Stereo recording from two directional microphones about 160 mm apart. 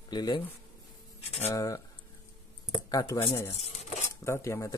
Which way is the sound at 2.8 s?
20° left (ahead or behind).